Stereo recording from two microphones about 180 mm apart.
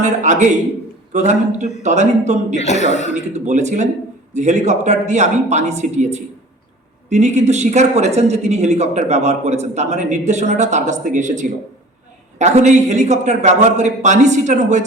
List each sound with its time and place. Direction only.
0.0 s speech: 40° right (ahead or behind)
2.6 s speech: 40° left (ahead or behind)
3.3 s speech: 40° right (ahead or behind)